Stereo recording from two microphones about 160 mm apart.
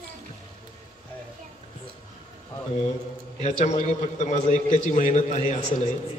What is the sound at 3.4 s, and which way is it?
A man's voice, 45° left (ahead or behind).